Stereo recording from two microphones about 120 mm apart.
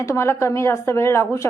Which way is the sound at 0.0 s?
25° left (ahead or behind).